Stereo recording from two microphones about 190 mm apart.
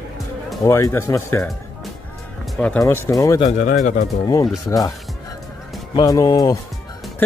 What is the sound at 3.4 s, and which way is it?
Speech, 40° left (ahead or behind).